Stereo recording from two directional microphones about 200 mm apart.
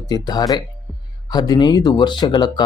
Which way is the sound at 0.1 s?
20° left (ahead or behind).